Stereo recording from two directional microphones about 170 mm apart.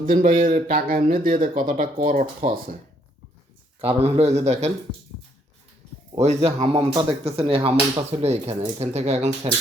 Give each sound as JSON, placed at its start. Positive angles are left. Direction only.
{"t": 0.0, "sound": "speech", "side_deg": -50}
{"t": 3.8, "sound": "speech", "side_deg": -35}
{"t": 6.1, "sound": "speech", "side_deg": -40}